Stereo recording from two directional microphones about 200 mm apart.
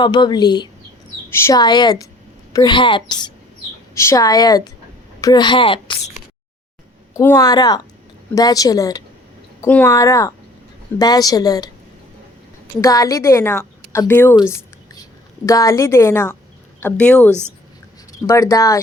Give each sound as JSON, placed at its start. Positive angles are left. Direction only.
{"t": 0.0, "sound": "a child's voice", "side_deg": 20}
{"t": 7.1, "sound": "a child's voice", "side_deg": 15}
{"t": 12.8, "sound": "speech", "side_deg": 15}
{"t": 15.4, "sound": "speech", "side_deg": 15}